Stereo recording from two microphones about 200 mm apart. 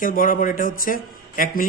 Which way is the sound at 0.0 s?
45° left (ahead or behind).